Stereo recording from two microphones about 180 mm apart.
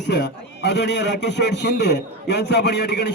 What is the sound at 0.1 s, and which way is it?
A man's voice, 70° left (ahead or behind).